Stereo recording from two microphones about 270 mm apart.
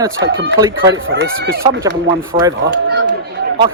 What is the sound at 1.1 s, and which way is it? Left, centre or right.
Speech, right.